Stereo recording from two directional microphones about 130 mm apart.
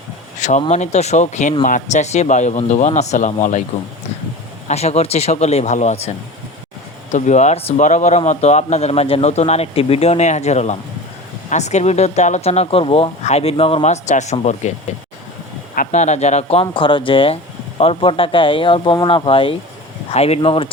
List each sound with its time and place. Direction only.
0.3 s a sound: 65° left (ahead or behind)
0.7 s a man's voice: 60° left (ahead or behind)
1.6 s a man's voice: 80° left
4.7 s a man's voice: 55° left (ahead or behind)
7.1 s a man's voice: 65° left (ahead or behind)
15.7 s a man's voice: 80° left; by 20.7 s 45° left (ahead or behind)